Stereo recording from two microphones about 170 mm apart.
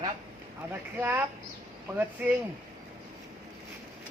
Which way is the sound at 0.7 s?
10° right (ahead or behind).